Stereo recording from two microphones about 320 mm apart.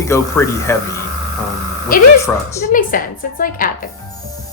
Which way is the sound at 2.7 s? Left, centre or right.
Left.